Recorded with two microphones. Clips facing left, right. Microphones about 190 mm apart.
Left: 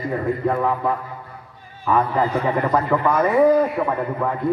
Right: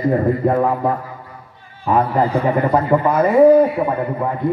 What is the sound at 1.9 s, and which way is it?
A man's voice, 30° right (ahead or behind).